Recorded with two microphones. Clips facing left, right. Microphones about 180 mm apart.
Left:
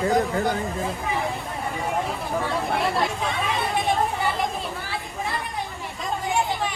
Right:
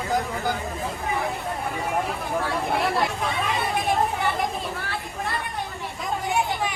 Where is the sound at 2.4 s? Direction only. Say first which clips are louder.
Even; centre (ahead or behind).